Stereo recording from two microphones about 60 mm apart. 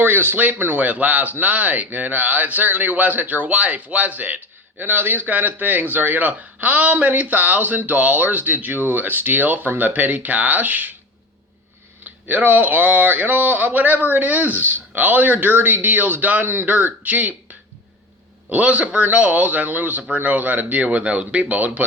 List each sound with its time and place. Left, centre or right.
0.0 s speech: right
12.3 s speech: right